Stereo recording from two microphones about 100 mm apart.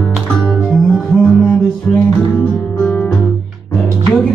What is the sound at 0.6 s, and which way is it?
Music, centre (ahead or behind).